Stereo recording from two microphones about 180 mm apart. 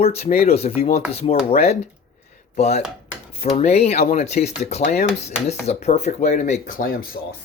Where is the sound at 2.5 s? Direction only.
35° left (ahead or behind).